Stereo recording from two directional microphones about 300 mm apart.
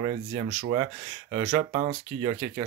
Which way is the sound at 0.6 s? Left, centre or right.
Centre.